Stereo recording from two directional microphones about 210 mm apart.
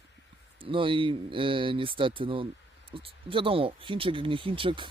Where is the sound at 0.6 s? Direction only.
25° right (ahead or behind).